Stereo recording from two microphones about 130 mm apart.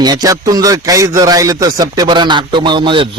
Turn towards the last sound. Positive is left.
turn(degrees=-40)  # may be behind; listen again after turning